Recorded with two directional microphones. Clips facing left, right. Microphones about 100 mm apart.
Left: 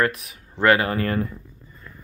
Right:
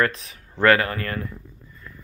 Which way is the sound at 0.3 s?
20° left (ahead or behind).